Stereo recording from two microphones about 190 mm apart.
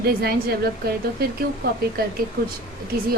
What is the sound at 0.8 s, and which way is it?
Speech, 55° right (ahead or behind).